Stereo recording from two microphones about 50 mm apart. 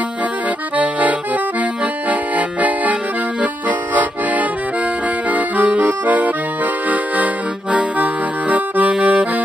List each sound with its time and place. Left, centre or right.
2.0 s music: right
3.6 s accordion: right